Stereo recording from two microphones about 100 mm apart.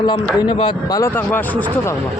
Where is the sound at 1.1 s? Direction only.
20° left (ahead or behind).